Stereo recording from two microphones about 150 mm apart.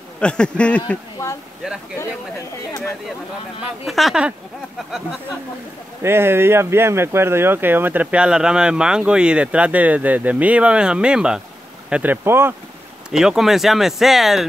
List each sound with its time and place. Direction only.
0.2 s speech: 5° left (ahead or behind)
1.2 s speech: 20° left (ahead or behind)
3.8 s speech: centre (ahead or behind)
6.0 s speech: 15° right (ahead or behind)
13.1 s speech: 5° right (ahead or behind)